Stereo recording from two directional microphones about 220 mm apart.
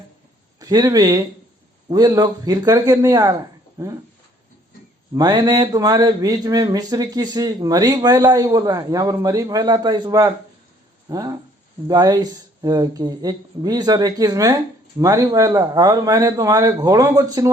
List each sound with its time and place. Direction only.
0.6 s speech: 15° right (ahead or behind)
5.1 s speech: 20° right (ahead or behind)